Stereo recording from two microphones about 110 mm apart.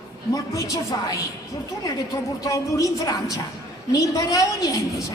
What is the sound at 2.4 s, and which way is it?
A woman's voice, 30° left (ahead or behind).